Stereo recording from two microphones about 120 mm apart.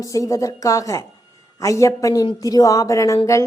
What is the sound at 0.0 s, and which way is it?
A woman's voice, 30° left (ahead or behind).